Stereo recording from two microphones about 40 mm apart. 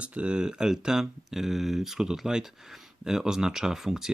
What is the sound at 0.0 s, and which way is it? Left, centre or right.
Speech, right.